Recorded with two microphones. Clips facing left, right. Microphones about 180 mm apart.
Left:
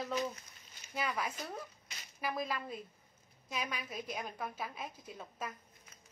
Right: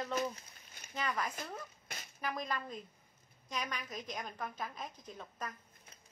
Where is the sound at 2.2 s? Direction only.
5° left (ahead or behind).